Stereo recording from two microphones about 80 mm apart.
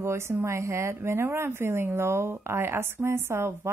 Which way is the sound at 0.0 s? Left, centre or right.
Right.